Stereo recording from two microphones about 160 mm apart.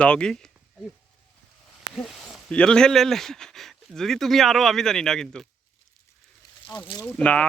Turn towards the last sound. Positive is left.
turn(degrees=10)  # may be behind; listen again after turning